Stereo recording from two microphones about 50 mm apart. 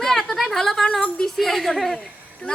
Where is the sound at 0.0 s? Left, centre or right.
Centre.